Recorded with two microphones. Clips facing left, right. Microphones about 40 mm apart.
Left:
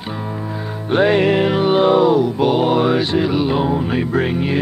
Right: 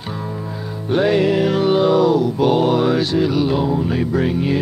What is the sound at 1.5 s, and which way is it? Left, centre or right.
Mantra, left.